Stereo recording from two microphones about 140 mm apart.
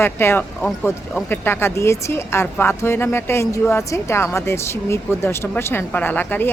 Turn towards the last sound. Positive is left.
turn(degrees=15)  # may be behind; listen again after turning